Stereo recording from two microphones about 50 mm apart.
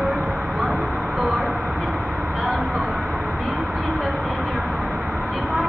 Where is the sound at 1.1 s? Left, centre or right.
Centre.